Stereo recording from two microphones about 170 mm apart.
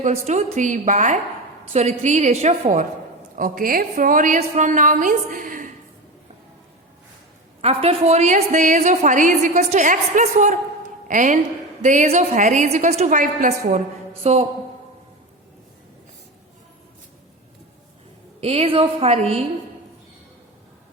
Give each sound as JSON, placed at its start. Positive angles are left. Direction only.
{"t": 0.0, "sound": "a woman's voice", "side_deg": -40}
{"t": 3.3, "sound": "a woman's voice", "side_deg": -55}
{"t": 7.6, "sound": "a woman's voice", "side_deg": -35}
{"t": 14.3, "sound": "a woman's voice", "side_deg": -40}
{"t": 18.3, "sound": "a woman's voice", "side_deg": -35}